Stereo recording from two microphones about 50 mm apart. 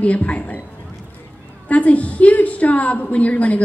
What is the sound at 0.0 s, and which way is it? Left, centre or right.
Speech, left.